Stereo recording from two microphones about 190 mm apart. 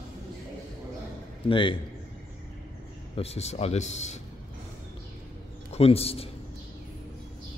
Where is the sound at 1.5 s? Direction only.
25° left (ahead or behind).